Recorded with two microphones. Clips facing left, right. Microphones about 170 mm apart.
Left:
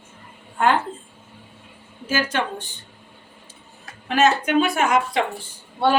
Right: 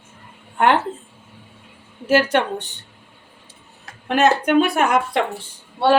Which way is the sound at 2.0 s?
65° right (ahead or behind).